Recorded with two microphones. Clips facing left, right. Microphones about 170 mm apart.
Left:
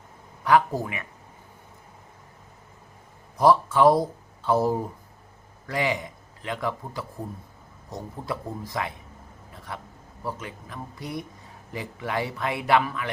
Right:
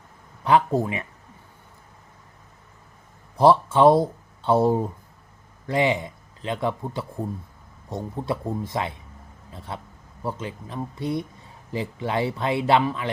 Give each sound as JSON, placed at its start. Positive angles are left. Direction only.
{"t": 0.4, "sound": "speech", "side_deg": -25}
{"t": 3.3, "sound": "speech", "side_deg": -25}